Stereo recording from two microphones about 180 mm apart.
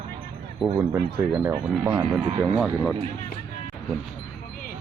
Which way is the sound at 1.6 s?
15° right (ahead or behind).